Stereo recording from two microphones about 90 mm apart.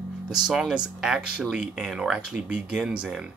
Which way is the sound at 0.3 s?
5° right (ahead or behind).